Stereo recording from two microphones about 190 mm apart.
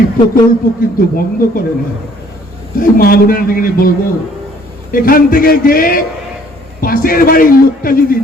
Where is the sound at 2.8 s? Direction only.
50° left (ahead or behind).